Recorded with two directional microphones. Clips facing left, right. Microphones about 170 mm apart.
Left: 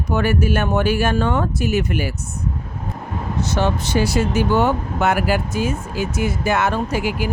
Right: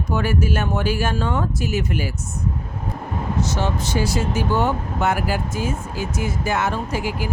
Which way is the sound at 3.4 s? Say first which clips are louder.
Left 5 dB; 65° left (ahead or behind).